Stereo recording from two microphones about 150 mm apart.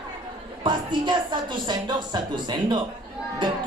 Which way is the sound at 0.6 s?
30° right (ahead or behind).